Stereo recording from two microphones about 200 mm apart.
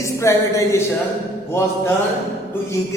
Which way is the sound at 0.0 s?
15° left (ahead or behind).